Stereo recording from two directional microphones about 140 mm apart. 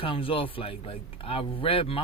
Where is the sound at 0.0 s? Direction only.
40° left (ahead or behind).